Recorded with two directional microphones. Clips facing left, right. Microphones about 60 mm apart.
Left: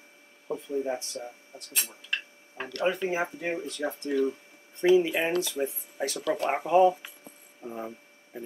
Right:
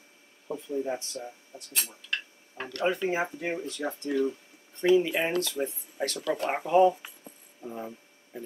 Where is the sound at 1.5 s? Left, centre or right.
Left.